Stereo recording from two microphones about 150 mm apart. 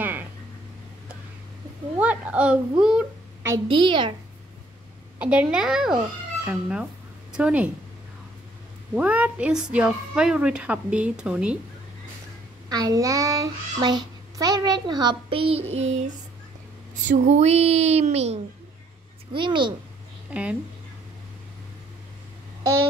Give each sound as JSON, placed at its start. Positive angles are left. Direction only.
{"t": 0.0, "sound": "a sound", "side_deg": -10}
{"t": 2.0, "sound": "a sound", "side_deg": -10}
{"t": 2.8, "sound": "a woman's voice", "side_deg": -5}
{"t": 3.6, "sound": "a child's voice", "side_deg": -35}
{"t": 5.2, "sound": "a woman's voice", "side_deg": -10}
{"t": 8.9, "sound": "a woman's voice", "side_deg": -10}
{"t": 12.6, "sound": "a child's voice", "side_deg": -25}
{"t": 17.1, "sound": "speech", "side_deg": -50}
{"t": 19.3, "sound": "a child's voice", "side_deg": -30}
{"t": 20.2, "sound": "speech", "side_deg": -10}